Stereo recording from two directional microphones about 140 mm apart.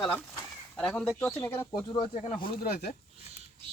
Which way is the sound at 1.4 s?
20° left (ahead or behind).